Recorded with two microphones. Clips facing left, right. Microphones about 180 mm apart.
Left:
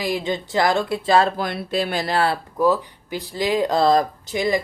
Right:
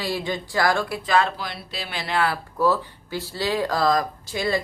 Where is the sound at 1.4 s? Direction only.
50° left (ahead or behind); by 2.3 s 35° left (ahead or behind).